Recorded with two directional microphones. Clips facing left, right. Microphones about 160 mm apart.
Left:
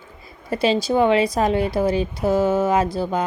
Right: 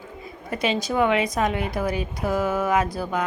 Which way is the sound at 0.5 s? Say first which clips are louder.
Left 5 dB; 30° left (ahead or behind).